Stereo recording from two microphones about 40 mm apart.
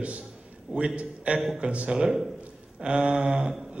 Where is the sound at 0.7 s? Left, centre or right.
Right.